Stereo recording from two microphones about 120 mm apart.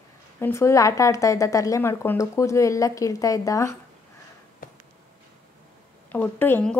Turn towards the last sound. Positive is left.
turn(degrees=10)  # may be behind; listen again after turning